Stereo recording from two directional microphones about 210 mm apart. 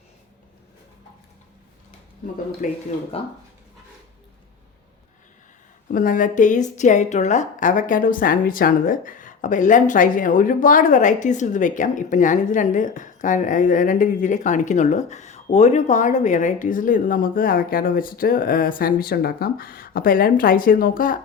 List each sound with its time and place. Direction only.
2.6 s a woman's voice: 40° left (ahead or behind)
3.1 s speech: 25° left (ahead or behind)
5.9 s a woman's voice: 40° left (ahead or behind)